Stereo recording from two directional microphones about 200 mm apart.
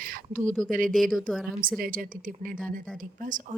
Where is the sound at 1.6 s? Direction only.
45° right (ahead or behind).